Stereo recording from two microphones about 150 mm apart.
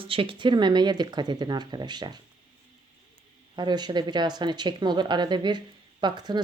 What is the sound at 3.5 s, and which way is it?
Speech, 30° right (ahead or behind).